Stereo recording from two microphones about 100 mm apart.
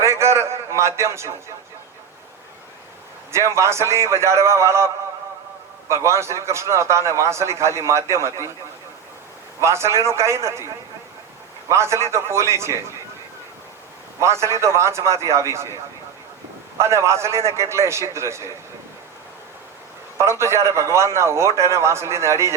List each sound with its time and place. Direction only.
0.0 s a sound: 30° right (ahead or behind)
3.3 s a man's voice: 30° right (ahead or behind)
5.9 s a man's voice: 30° right (ahead or behind)
9.6 s a man's voice: 30° right (ahead or behind)
11.7 s a man's voice: 30° right (ahead or behind)
14.2 s a man's voice: 30° right (ahead or behind)
16.7 s a man's voice: 30° right (ahead or behind)
20.1 s a man's voice: 25° right (ahead or behind)